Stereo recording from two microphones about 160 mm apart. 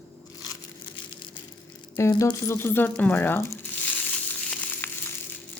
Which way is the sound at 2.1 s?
30° left (ahead or behind).